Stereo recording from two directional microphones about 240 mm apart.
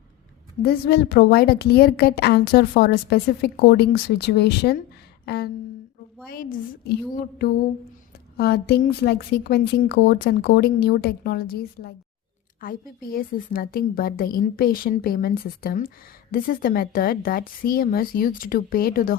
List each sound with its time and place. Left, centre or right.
0.6 s a woman's voice: left
5.2 s a sound: left
6.2 s a woman's voice: left